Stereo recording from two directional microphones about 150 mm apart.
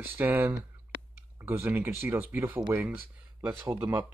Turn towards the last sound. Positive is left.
turn(degrees=-15)  # may be behind; listen again after turning